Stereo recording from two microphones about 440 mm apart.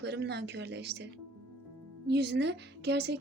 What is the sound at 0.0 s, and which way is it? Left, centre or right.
A woman's voice, right.